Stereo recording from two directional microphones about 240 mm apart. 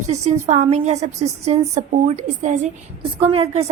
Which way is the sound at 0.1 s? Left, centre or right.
Right.